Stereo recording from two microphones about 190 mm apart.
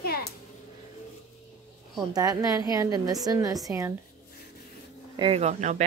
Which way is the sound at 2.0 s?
20° right (ahead or behind).